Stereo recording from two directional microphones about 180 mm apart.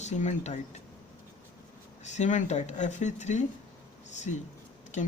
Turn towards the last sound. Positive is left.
turn(degrees=40)  # may be behind; listen again after turning